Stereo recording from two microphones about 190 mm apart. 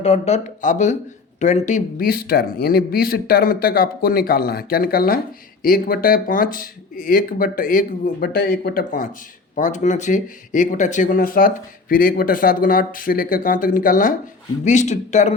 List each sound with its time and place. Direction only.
0.0 s speech: 35° left (ahead or behind)